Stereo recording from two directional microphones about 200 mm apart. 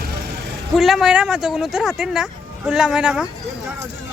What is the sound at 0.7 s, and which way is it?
Speech, centre (ahead or behind).